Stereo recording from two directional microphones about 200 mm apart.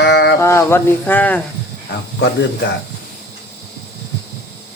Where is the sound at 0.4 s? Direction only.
15° left (ahead or behind).